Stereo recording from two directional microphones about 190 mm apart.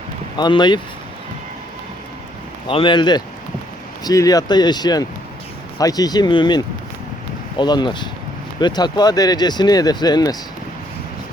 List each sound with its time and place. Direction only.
0.3 s speech: 25° left (ahead or behind)
2.6 s speech: 25° left (ahead or behind)